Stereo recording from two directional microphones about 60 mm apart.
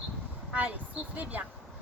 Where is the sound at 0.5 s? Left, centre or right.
Right.